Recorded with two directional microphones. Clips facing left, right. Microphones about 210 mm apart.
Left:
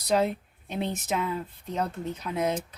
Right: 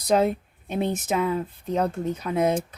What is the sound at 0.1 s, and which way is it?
Speech, 50° right (ahead or behind).